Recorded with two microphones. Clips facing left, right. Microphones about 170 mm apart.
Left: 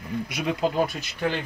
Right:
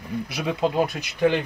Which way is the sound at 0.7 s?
20° right (ahead or behind).